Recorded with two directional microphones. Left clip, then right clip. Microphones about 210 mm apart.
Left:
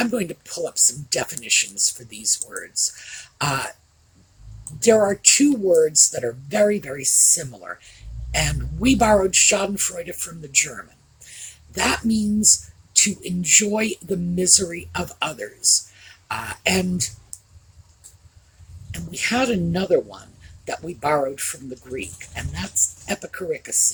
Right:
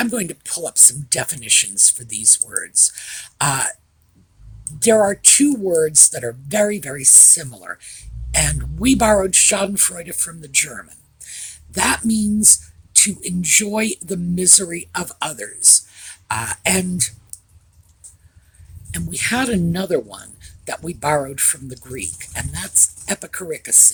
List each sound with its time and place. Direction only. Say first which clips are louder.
0.0 s speech: right 1 dB; 45° right (ahead or behind)
4.8 s speech: right 2 dB; 40° right (ahead or behind)
18.9 s speech: right 2 dB; 45° right (ahead or behind)